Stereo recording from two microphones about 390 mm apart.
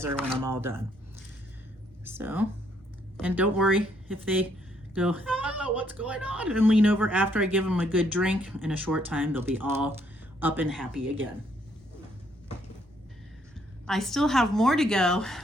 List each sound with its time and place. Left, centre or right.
0.0 s speech: centre
2.0 s speech: centre
13.8 s speech: centre